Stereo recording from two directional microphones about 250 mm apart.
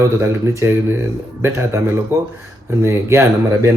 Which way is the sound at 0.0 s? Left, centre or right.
Centre.